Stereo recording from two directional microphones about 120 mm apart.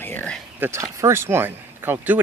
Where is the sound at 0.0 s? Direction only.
20° left (ahead or behind).